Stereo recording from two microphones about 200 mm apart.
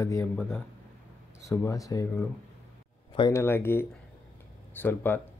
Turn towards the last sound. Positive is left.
turn(degrees=10)  # may be behind; listen again after turning